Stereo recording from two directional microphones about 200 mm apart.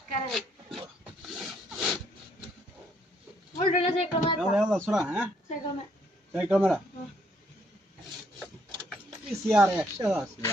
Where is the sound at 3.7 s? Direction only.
30° left (ahead or behind).